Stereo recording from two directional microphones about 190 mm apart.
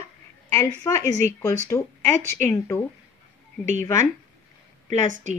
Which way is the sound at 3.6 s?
40° right (ahead or behind).